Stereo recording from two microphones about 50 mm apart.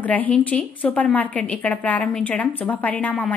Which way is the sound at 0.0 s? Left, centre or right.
Left.